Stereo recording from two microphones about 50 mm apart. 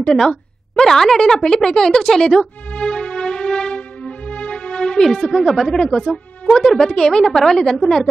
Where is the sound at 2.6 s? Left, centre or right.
Left.